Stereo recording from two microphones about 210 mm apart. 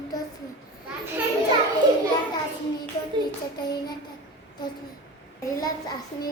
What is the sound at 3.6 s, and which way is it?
Child singing, 20° left (ahead or behind).